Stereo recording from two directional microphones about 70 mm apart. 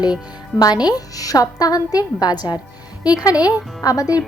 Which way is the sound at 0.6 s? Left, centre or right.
Left.